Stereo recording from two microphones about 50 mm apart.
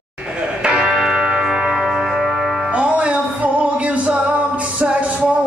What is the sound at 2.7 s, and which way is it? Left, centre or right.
Music, right.